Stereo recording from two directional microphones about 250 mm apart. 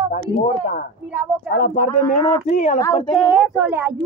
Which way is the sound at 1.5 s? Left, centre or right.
Left.